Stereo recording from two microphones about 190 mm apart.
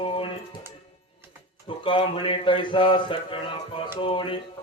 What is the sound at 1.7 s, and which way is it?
Speech, 25° left (ahead or behind).